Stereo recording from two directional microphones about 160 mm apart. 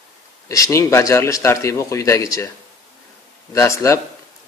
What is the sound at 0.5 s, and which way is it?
Speech, 20° left (ahead or behind).